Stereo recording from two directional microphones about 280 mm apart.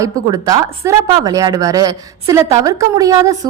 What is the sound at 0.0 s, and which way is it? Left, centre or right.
Speech, centre.